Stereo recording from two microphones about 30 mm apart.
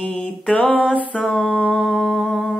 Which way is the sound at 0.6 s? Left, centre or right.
Left.